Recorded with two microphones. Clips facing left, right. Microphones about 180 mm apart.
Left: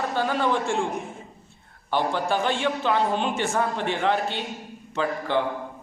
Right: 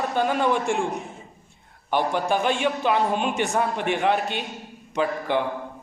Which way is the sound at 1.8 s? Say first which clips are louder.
Right 1 dB; 15° right (ahead or behind).